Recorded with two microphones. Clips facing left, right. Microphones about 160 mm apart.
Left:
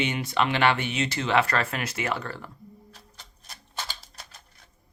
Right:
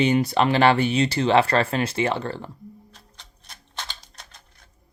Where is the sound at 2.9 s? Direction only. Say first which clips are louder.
Even; 5° left (ahead or behind).